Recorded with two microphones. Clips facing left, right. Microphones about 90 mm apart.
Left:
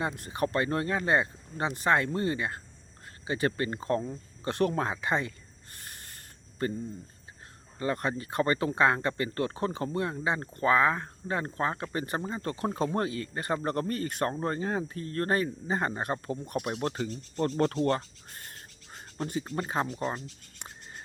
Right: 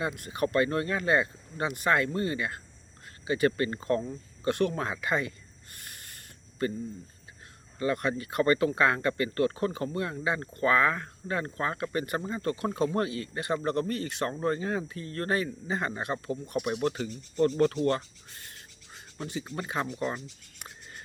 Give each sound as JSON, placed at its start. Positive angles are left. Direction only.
{"t": 0.0, "sound": "speech", "side_deg": 30}
{"t": 5.7, "sound": "a sound", "side_deg": 35}
{"t": 6.6, "sound": "speech", "side_deg": 35}
{"t": 7.8, "sound": "speech", "side_deg": 30}